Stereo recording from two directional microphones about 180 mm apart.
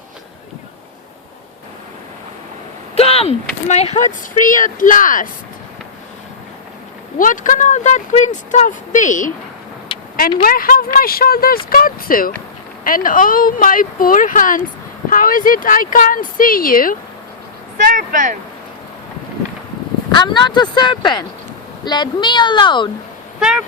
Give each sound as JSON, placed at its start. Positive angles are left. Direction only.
{"t": 2.9, "sound": "speech", "side_deg": 35}
{"t": 7.2, "sound": "speech", "side_deg": 45}
{"t": 10.4, "sound": "speech", "side_deg": 55}
{"t": 17.7, "sound": "a sound", "side_deg": -45}
{"t": 20.1, "sound": "speech", "side_deg": 25}
{"t": 23.4, "sound": "a sound", "side_deg": -5}